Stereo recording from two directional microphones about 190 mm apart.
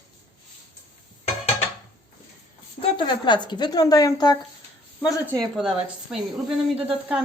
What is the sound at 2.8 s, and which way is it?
A woman's voice, 25° left (ahead or behind).